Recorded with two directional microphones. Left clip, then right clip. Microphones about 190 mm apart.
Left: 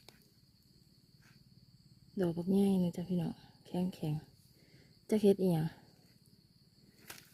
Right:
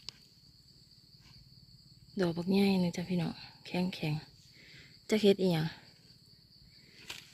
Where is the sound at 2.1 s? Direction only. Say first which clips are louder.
Right 2 dB; 5° left (ahead or behind).